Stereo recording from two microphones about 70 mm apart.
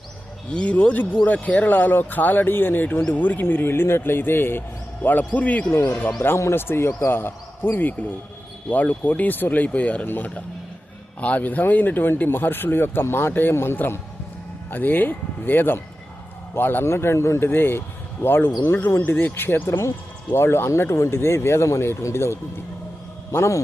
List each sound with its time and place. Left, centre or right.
0.5 s speech: centre
5.7 s speech: left
6.1 s speech: left